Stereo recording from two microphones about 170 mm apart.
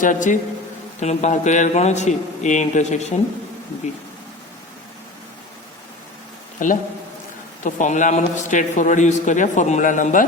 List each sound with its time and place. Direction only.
0.0 s a man's voice: 50° left (ahead or behind)
6.6 s a man's voice: 50° left (ahead or behind)